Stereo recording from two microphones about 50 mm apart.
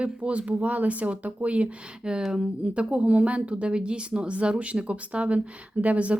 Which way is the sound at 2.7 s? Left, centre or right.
Right.